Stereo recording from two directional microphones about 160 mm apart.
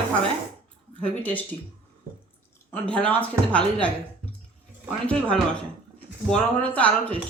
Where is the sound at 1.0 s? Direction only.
10° left (ahead or behind).